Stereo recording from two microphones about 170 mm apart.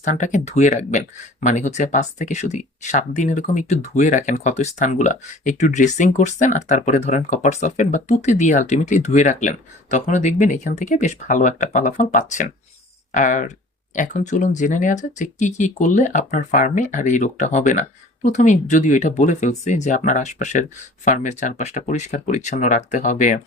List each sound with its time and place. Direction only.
0.0 s speech: 50° left (ahead or behind)